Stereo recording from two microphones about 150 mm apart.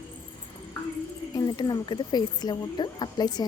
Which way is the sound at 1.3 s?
25° left (ahead or behind).